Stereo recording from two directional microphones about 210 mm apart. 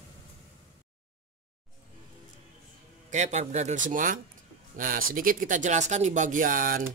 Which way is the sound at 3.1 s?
35° right (ahead or behind).